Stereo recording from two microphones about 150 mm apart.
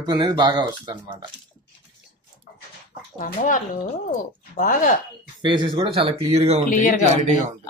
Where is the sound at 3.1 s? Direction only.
60° left (ahead or behind).